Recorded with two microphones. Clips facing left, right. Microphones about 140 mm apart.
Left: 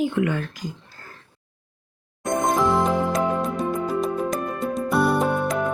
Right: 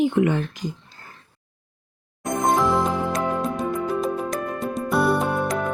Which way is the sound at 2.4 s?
Centre (ahead or behind).